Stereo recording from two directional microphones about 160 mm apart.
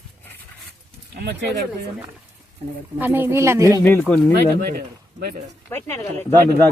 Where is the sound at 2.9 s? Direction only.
10° right (ahead or behind).